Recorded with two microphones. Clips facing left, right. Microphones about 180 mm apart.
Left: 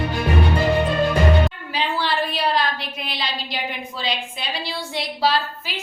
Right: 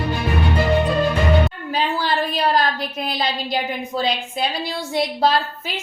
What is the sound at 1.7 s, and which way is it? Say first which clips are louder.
A woman's voice: right 3 dB; 45° right (ahead or behind).